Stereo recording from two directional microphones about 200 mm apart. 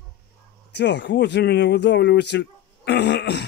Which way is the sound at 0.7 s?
60° left (ahead or behind).